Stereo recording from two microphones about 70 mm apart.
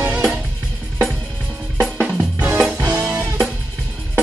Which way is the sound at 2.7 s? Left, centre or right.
Right.